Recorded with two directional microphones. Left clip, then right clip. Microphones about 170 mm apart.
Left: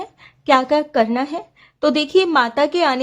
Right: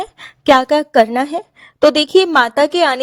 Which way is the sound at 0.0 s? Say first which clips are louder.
Right 9 dB; 55° right (ahead or behind).